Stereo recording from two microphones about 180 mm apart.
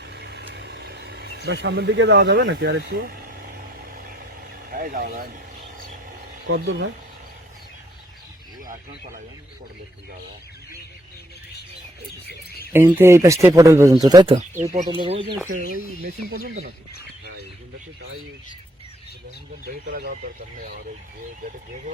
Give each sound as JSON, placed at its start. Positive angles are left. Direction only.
{"t": 0.1, "sound": "vehicle", "side_deg": -70}
{"t": 4.7, "sound": "speech", "side_deg": -50}
{"t": 6.5, "sound": "speech", "side_deg": -90}
{"t": 12.7, "sound": "speech", "side_deg": -10}
{"t": 14.6, "sound": "speech", "side_deg": -40}
{"t": 14.8, "sound": "speech", "side_deg": -30}
{"t": 15.4, "sound": "speech", "side_deg": -50}
{"t": 19.6, "sound": "speech", "side_deg": -55}